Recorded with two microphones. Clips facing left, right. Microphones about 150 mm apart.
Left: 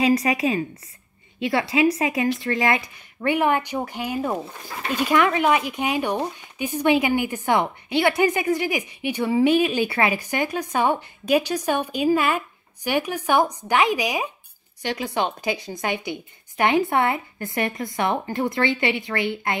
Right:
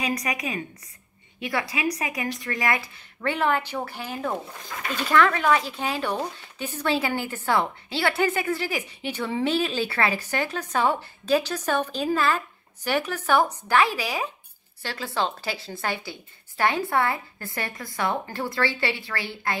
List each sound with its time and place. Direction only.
0.0 s a woman's voice: 30° left (ahead or behind)